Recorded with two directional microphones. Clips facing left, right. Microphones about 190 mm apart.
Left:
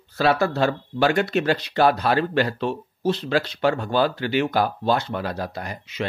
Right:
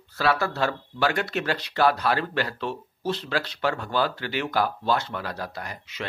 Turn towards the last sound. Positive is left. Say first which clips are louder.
# left 4 dB
turn(degrees=20)  # may be behind; listen again after turning